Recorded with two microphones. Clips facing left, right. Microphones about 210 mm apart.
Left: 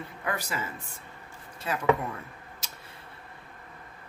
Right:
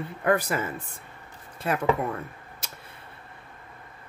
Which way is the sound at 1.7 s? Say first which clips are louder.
Right 5 dB; 55° right (ahead or behind).